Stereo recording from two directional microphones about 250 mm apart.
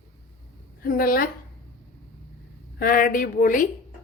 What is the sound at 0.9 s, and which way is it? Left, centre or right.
Speech, left.